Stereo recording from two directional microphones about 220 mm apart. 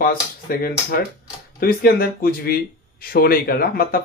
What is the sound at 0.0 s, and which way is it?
Speech, 40° left (ahead or behind).